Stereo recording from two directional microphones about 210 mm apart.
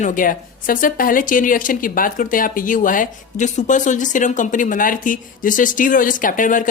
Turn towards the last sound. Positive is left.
turn(degrees=40)  # may be behind; listen again after turning